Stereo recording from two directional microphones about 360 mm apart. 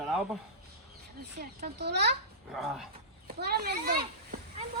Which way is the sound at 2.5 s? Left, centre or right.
Centre.